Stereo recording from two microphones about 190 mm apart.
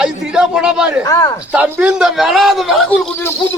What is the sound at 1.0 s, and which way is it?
Speech, 15° left (ahead or behind).